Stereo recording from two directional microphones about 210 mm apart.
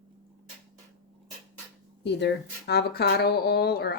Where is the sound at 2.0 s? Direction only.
55° left (ahead or behind).